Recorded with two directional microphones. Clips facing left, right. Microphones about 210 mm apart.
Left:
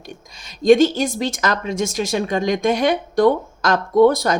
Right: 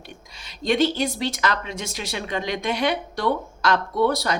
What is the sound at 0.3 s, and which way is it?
Speech, 45° left (ahead or behind).